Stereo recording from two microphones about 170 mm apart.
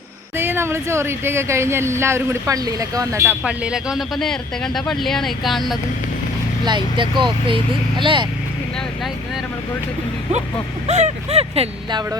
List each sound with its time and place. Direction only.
0.3 s speech: 15° right (ahead or behind)
3.4 s speech: 5° right (ahead or behind)
6.7 s speech: 30° right (ahead or behind)
10.8 s speech: 40° right (ahead or behind)